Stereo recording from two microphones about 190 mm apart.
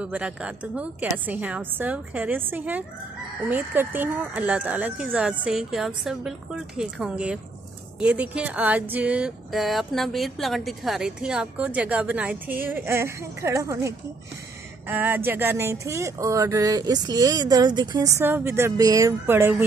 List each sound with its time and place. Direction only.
0.0 s speech: 5° right (ahead or behind)